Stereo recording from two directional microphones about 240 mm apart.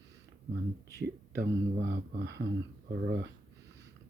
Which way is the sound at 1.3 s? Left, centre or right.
Right.